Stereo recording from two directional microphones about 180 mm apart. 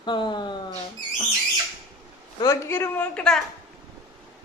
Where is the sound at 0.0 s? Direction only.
25° left (ahead or behind).